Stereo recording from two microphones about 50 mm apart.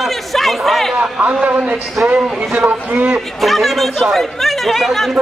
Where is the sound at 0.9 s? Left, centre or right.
Right.